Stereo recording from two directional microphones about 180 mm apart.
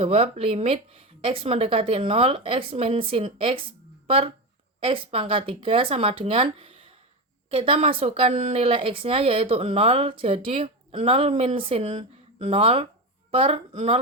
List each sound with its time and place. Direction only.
0.0 s a woman's voice: 35° right (ahead or behind)